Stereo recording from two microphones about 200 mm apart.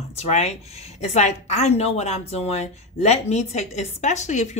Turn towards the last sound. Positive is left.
turn(degrees=35)  # may be behind; listen again after turning